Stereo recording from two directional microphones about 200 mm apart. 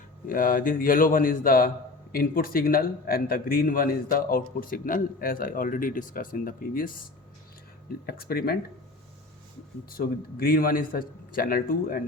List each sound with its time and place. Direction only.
0.3 s a man's voice: 45° left (ahead or behind)
8.0 s a man's voice: 50° left (ahead or behind)
9.9 s a man's voice: 50° left (ahead or behind)